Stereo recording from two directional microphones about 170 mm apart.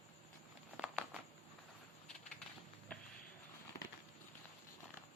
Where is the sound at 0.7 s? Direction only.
5° right (ahead or behind).